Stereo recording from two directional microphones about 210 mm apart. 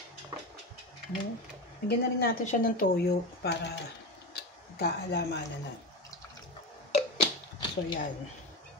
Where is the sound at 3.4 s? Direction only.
55° left (ahead or behind).